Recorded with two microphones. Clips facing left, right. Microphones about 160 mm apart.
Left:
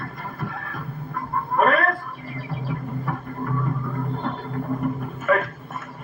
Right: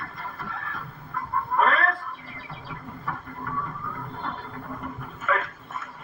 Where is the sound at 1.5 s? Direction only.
50° left (ahead or behind).